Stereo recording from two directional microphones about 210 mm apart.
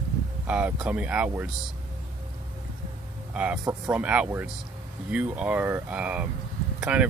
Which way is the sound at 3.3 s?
5° right (ahead or behind).